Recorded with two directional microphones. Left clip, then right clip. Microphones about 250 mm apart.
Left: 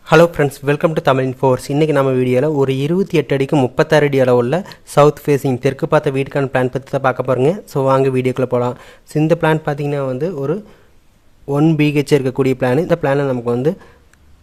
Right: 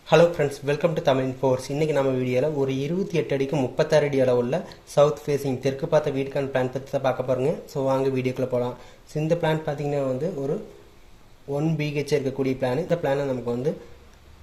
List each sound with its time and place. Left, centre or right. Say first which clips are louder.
0.1 s speech: left 7 dB; left